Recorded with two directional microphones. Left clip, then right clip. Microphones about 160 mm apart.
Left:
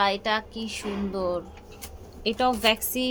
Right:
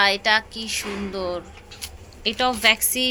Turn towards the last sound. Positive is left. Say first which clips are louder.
# right 5 dB
turn(degrees=15)  # may be behind; listen again after turning